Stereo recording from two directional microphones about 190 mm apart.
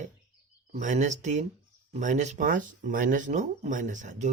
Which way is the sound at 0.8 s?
40° right (ahead or behind).